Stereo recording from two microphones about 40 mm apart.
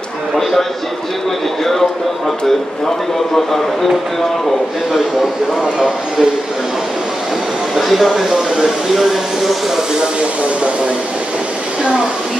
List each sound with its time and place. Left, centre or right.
0.4 s a man's voice: centre
3.3 s speech: centre
5.6 s speech: centre
7.7 s a sound: centre
8.1 s speech: centre